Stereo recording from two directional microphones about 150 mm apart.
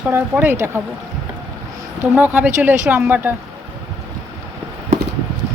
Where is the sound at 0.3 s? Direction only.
15° right (ahead or behind).